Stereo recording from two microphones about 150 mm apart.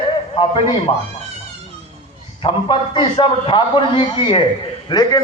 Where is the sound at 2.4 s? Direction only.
30° left (ahead or behind).